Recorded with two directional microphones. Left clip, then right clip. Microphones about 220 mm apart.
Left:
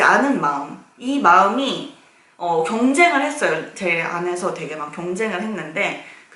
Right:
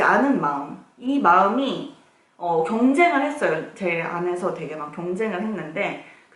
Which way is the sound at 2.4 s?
30° right (ahead or behind).